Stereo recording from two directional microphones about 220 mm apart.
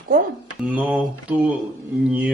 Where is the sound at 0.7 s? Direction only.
5° right (ahead or behind).